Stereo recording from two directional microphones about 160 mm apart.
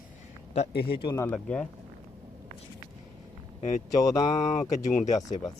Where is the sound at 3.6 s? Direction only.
50° left (ahead or behind).